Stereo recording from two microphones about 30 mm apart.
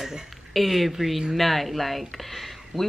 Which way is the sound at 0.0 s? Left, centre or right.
Centre.